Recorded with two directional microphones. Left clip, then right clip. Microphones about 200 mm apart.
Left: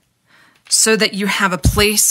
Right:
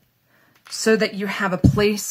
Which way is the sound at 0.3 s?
55° left (ahead or behind).